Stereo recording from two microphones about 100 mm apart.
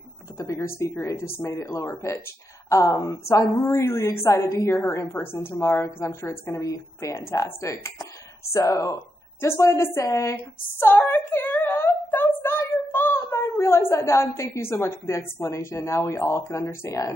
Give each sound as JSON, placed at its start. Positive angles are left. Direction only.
{"t": 0.4, "sound": "speech", "side_deg": 30}